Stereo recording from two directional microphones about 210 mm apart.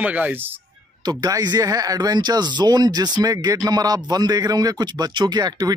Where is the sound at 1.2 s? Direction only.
20° right (ahead or behind).